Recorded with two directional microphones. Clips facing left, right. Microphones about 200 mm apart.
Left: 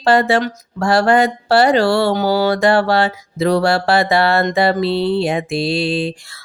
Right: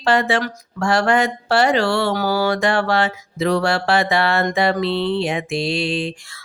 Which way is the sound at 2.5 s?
35° left (ahead or behind).